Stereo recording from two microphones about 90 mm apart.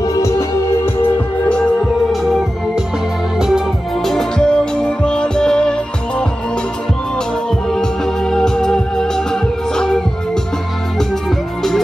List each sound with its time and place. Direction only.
0.0 s music: 40° left (ahead or behind)
3.3 s music: 5° right (ahead or behind)
7.7 s music: 5° left (ahead or behind)